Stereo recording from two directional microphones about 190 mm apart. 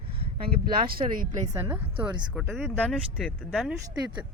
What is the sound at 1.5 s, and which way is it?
Speech, 10° right (ahead or behind).